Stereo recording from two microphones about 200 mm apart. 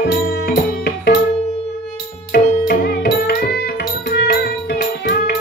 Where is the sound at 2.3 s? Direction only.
50° left (ahead or behind).